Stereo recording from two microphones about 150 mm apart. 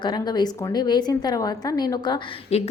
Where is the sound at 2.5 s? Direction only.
45° left (ahead or behind).